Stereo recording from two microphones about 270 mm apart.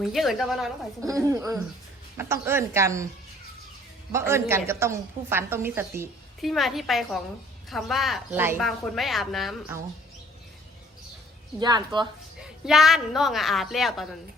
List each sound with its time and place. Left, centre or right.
0.0 s a woman's voice: centre
1.3 s a woman's voice: centre
4.1 s a woman's voice: centre
11.6 s a woman's voice: centre
12.4 s a woman's voice: centre